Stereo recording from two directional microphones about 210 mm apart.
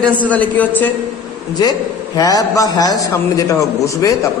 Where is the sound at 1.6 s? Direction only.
20° left (ahead or behind).